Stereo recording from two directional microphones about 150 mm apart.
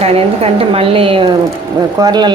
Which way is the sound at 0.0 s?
40° right (ahead or behind).